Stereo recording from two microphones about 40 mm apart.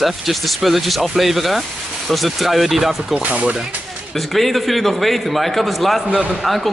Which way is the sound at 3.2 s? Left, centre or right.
Right.